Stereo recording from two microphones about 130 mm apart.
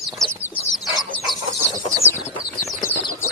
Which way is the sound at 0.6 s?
Centre (ahead or behind).